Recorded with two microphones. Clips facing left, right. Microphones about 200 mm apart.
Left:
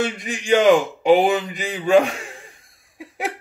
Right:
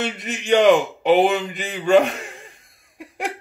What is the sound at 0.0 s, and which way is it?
Speech, centre (ahead or behind).